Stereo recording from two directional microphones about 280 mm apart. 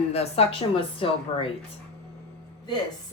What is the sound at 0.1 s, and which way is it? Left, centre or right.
A woman's voice, left.